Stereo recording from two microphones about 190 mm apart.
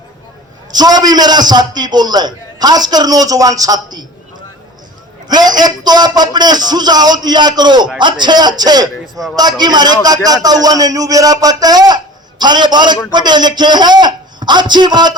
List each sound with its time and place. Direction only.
0.7 s a man's voice: 20° right (ahead or behind)
5.3 s a man's voice: 20° right (ahead or behind)